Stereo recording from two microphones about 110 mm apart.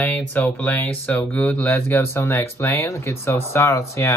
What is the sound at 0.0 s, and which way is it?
Speech, 15° left (ahead or behind).